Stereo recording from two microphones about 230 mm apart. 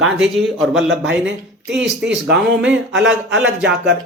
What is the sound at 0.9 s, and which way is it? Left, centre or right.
Speech, right.